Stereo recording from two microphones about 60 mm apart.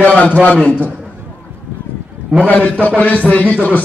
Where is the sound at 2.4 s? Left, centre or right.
Left.